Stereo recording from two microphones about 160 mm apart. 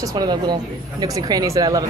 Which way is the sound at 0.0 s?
25° right (ahead or behind).